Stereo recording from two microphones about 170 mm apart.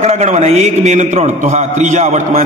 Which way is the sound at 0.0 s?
40° right (ahead or behind).